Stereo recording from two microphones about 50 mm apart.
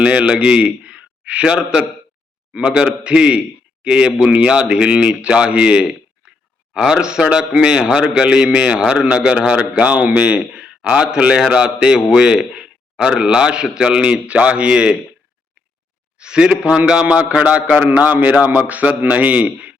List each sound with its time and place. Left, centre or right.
0.0 s a man's voice: right
4.3 s a man's voice: right
16.1 s a man's voice: centre; by 19.7 s right